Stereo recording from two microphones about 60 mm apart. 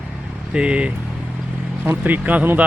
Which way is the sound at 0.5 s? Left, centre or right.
Centre.